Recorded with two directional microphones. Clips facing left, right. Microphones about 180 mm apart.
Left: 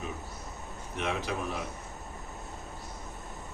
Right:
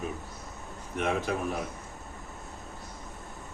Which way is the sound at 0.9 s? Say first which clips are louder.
Right 4 dB; 50° right (ahead or behind).